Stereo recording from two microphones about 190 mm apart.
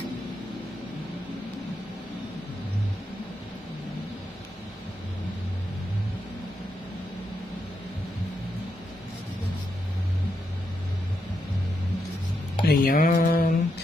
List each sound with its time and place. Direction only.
12.6 s mantra: 55° left (ahead or behind)